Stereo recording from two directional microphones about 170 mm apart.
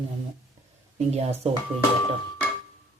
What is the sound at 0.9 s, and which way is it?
Speech, 40° right (ahead or behind).